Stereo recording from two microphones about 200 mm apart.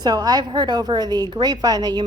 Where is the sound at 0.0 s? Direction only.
20° right (ahead or behind).